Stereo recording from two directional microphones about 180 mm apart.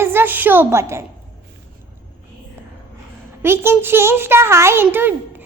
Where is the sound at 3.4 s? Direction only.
15° right (ahead or behind).